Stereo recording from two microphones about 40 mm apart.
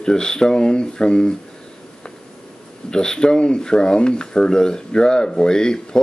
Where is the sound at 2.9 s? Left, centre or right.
Centre.